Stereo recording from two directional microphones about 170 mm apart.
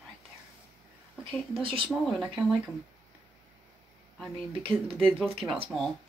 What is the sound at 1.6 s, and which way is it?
Speech, 30° right (ahead or behind).